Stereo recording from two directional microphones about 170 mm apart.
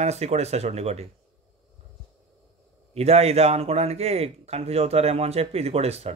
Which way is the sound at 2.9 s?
40° right (ahead or behind).